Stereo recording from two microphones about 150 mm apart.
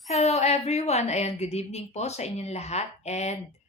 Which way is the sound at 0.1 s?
45° left (ahead or behind).